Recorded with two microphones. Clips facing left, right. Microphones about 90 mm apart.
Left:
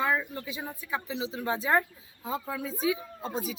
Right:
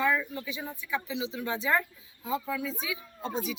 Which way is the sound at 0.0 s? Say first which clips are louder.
Right 1 dB; 25° left (ahead or behind).